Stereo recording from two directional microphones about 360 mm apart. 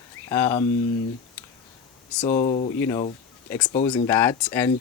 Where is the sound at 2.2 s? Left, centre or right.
Centre.